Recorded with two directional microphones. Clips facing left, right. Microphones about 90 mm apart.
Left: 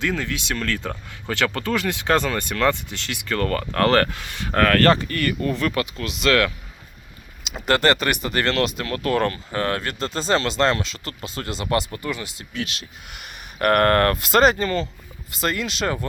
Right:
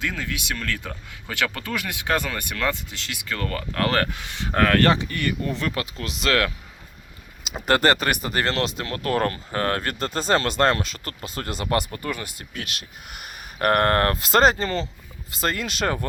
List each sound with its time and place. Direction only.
0.0 s speech: 10° right (ahead or behind)
4.1 s speech: 20° right (ahead or behind)
7.7 s speech: 35° right (ahead or behind)